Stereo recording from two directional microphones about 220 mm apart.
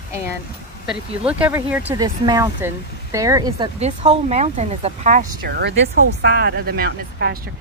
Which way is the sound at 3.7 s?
30° right (ahead or behind).